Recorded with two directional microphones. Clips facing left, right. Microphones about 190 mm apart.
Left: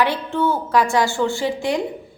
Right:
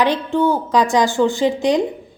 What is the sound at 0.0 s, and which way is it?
A woman's voice, 15° right (ahead or behind).